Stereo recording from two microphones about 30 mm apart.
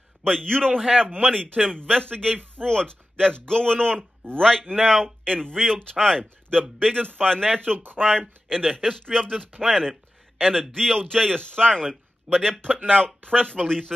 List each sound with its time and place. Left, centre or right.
0.2 s speech: left